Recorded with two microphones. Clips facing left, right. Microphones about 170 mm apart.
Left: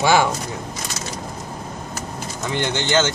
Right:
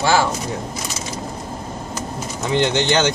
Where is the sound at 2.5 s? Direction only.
20° right (ahead or behind).